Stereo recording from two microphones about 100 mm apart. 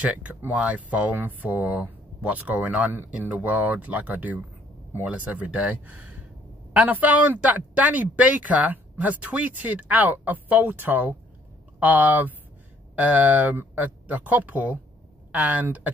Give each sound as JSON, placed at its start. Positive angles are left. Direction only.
{"t": 0.0, "sound": "speech", "side_deg": -15}